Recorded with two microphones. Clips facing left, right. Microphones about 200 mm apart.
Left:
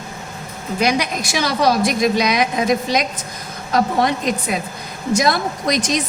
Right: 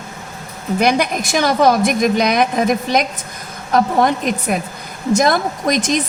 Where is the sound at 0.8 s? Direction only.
55° right (ahead or behind).